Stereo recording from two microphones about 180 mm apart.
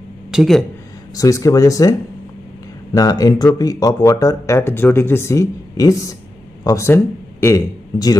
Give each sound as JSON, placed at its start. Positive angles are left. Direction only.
{"t": 0.3, "sound": "speech", "side_deg": 0}
{"t": 1.1, "sound": "a man's voice", "side_deg": 20}